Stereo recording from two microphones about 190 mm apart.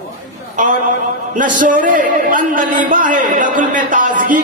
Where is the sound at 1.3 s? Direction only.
45° right (ahead or behind).